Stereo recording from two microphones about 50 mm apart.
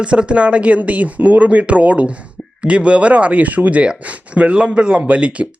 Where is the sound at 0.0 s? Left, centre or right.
Right.